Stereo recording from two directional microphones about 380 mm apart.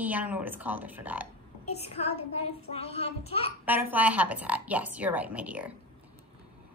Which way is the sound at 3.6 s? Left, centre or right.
Centre.